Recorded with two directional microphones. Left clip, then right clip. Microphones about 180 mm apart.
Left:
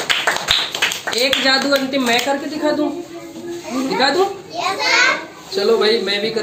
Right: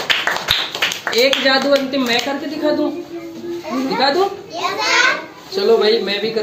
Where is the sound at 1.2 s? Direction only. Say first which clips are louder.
Right 1 dB; 40° left (ahead or behind).